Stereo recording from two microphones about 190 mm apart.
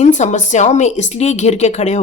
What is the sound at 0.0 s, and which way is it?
Speech, 40° left (ahead or behind).